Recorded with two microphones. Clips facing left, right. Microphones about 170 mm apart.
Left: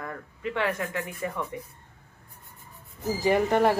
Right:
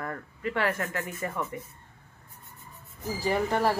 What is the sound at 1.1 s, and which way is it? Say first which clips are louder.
Speech: left 1 dB; centre (ahead or behind).